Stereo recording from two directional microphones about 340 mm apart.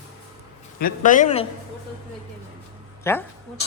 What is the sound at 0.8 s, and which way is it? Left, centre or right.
Speech, left.